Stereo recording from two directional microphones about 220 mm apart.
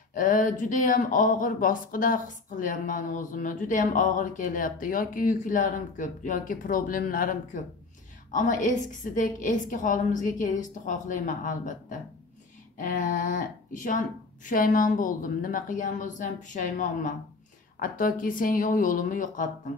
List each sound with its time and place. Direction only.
0.1 s speech: 35° left (ahead or behind)